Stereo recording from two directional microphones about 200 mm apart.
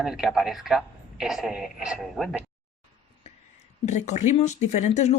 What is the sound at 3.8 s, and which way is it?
Speech, 35° left (ahead or behind).